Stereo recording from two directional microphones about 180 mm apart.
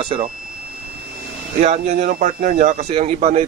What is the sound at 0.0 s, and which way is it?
Speech, 30° right (ahead or behind).